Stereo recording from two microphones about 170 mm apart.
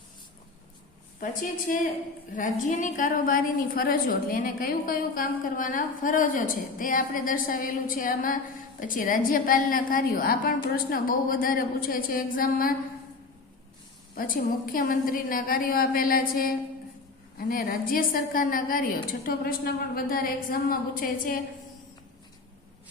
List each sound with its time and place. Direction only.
1.2 s a woman's voice: 55° left (ahead or behind)
14.2 s a woman's voice: 55° left (ahead or behind)